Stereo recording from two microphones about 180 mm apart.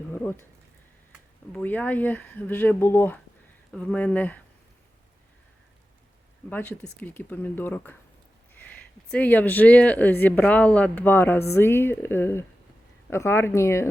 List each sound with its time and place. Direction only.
0.1 s a sound: 10° left (ahead or behind)
1.5 s speech: 10° left (ahead or behind)
6.5 s speech: 10° left (ahead or behind)